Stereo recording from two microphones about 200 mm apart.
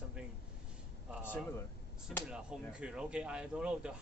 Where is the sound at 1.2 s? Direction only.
10° left (ahead or behind).